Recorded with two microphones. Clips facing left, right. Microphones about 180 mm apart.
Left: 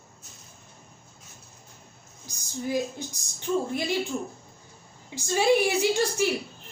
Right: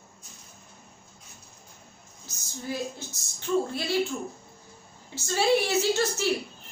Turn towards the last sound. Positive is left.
turn(degrees=15)  # may be behind; listen again after turning